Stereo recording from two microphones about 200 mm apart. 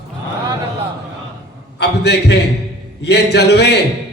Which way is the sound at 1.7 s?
55° left (ahead or behind).